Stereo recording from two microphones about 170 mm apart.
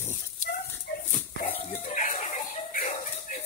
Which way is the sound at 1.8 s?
50° left (ahead or behind).